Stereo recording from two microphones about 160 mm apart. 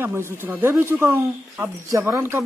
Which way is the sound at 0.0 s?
15° right (ahead or behind).